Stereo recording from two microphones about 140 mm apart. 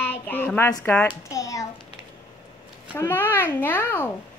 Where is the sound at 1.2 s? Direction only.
25° left (ahead or behind).